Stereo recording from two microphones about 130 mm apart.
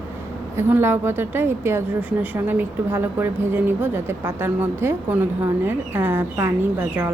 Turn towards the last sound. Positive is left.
turn(degrees=-15)  # may be behind; listen again after turning